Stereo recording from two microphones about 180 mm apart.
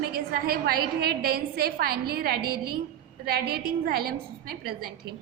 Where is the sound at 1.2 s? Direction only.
60° right (ahead or behind).